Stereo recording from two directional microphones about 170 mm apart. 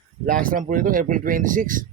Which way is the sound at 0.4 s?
55° right (ahead or behind).